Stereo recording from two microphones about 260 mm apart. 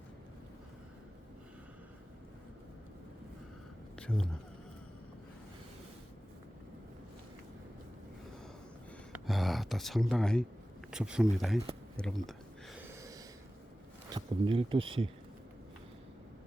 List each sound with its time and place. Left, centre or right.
3.9 s a sound: centre
9.2 s speech: centre
14.1 s speech: centre